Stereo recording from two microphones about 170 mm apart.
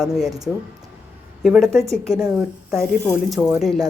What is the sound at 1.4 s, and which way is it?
Speech, centre (ahead or behind).